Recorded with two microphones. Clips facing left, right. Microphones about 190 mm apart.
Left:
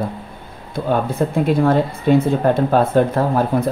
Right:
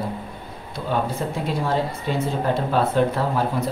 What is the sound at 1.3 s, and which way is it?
Speech, 55° left (ahead or behind).